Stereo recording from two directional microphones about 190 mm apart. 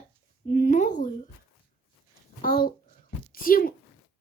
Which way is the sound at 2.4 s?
50° left (ahead or behind).